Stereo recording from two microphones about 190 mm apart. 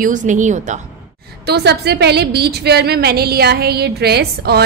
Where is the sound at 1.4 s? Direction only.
60° right (ahead or behind).